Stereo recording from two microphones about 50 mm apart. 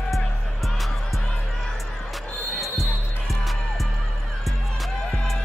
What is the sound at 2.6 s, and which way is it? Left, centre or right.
Music, centre.